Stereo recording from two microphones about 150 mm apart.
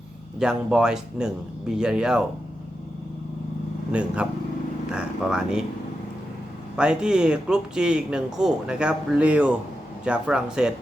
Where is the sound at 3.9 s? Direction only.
10° right (ahead or behind).